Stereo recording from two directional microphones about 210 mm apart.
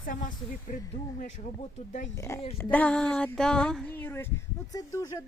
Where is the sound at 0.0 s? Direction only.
40° left (ahead or behind).